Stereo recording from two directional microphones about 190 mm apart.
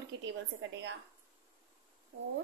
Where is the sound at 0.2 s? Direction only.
80° right.